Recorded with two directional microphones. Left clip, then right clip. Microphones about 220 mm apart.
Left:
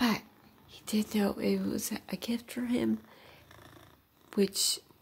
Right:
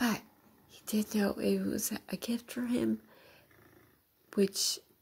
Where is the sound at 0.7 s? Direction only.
5° right (ahead or behind).